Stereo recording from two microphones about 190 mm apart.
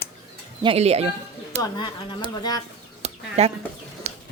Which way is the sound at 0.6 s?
30° right (ahead or behind).